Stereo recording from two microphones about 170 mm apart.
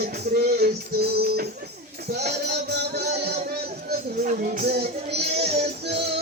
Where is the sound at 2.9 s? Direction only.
70° right (ahead or behind).